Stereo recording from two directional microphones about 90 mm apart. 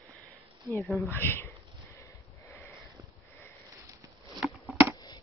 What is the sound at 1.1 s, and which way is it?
Sniff, 25° left (ahead or behind).